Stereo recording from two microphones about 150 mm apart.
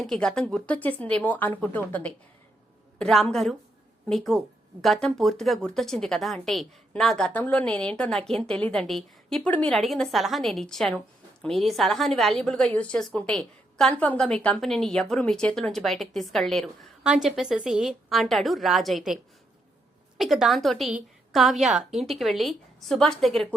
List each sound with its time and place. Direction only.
0.0 s a woman's voice: 5° left (ahead or behind)